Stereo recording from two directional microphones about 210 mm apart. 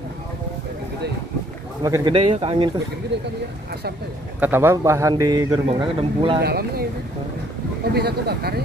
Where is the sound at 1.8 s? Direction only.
20° right (ahead or behind).